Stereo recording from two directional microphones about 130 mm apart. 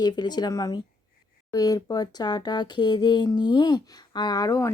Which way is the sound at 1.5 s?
30° left (ahead or behind).